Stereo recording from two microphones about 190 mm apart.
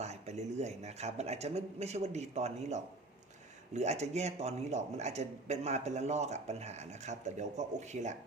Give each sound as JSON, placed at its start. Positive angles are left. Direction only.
{"t": 0.0, "sound": "speech", "side_deg": -35}